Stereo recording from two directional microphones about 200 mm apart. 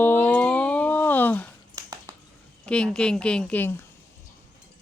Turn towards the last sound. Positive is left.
turn(degrees=10)  # may be behind; listen again after turning